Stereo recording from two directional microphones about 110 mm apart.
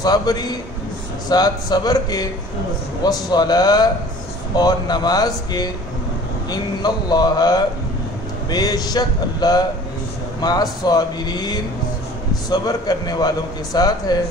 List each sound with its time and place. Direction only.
0.0 s speech: 35° left (ahead or behind)